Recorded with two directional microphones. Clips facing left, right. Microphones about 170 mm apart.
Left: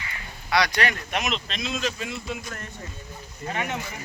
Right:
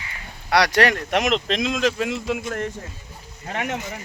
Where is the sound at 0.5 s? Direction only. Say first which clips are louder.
Right 6 dB; 70° right (ahead or behind).